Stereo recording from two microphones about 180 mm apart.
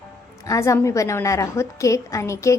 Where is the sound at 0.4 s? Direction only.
20° left (ahead or behind).